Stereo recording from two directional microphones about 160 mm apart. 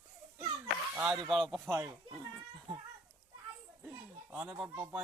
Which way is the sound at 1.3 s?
Centre (ahead or behind).